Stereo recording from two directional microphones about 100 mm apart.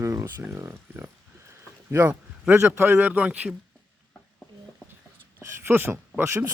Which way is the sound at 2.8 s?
20° right (ahead or behind).